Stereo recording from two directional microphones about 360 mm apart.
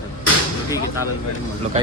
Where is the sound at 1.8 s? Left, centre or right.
Centre.